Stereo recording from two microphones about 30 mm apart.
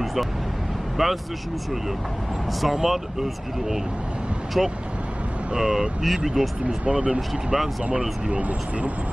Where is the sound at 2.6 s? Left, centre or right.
Centre.